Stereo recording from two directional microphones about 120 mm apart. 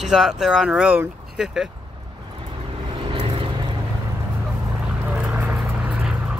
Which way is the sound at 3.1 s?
55° right (ahead or behind).